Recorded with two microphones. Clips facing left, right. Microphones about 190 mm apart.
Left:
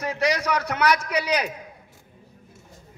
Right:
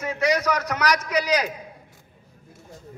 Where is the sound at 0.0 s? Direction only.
35° left (ahead or behind).